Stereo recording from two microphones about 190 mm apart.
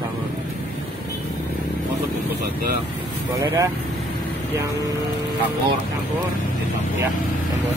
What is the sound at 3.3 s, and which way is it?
Speech, 15° right (ahead or behind).